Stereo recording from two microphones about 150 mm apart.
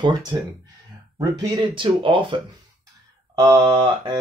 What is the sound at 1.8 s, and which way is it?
Speech, 35° right (ahead or behind).